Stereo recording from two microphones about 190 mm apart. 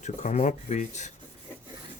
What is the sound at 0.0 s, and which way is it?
Speech, 40° left (ahead or behind).